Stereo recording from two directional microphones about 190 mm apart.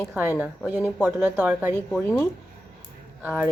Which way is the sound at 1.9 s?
5° left (ahead or behind).